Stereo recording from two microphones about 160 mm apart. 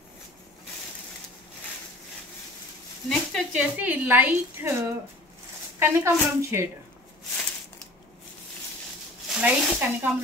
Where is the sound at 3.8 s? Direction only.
10° right (ahead or behind).